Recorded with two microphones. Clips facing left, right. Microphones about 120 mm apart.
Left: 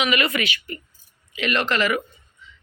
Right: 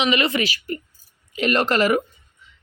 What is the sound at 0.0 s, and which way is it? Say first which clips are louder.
Speech: right 2 dB; 30° right (ahead or behind).